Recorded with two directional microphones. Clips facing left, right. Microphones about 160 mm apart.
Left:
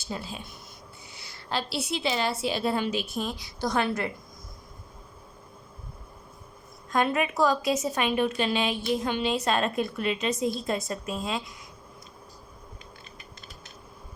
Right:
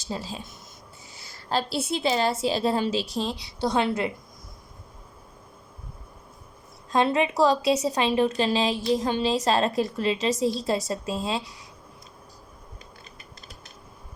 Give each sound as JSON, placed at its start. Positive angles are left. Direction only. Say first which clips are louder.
{"t": 0.1, "sound": "a woman's voice", "louder": "right 2 dB", "side_deg": -35}
{"t": 1.5, "sound": "a woman's voice", "louder": "right 4 dB", "side_deg": -40}
{"t": 6.9, "sound": "a woman's voice", "louder": "right 3 dB", "side_deg": -25}